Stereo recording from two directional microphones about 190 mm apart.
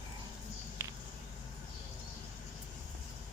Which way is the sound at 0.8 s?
15° right (ahead or behind).